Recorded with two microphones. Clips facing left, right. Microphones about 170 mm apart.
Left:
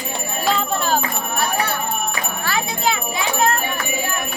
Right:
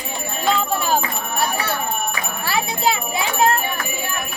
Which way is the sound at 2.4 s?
35° right (ahead or behind).